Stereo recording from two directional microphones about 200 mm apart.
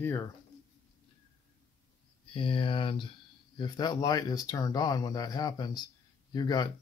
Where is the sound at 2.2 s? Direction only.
25° left (ahead or behind).